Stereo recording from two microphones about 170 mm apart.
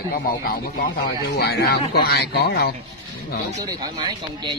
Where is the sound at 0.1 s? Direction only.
60° left (ahead or behind).